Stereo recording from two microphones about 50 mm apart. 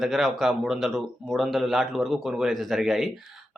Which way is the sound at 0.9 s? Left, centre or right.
Centre.